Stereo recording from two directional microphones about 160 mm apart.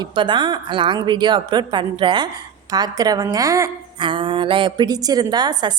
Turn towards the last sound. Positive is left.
turn(degrees=-25)  # may be behind; listen again after turning